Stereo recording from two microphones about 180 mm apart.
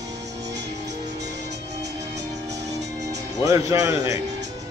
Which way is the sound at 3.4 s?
15° right (ahead or behind).